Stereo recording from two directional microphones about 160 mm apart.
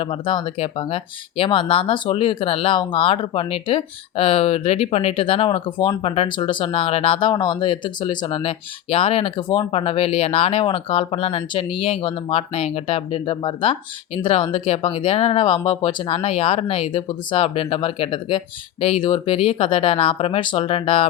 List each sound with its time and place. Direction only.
0.0 s speech: 35° left (ahead or behind)